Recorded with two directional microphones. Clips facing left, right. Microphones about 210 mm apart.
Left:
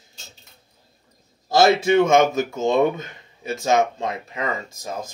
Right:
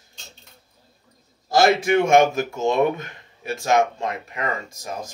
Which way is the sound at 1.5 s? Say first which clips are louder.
Left 1 dB; 25° left (ahead or behind).